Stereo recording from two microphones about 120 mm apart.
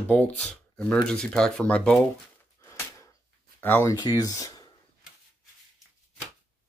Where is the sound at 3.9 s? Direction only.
30° left (ahead or behind).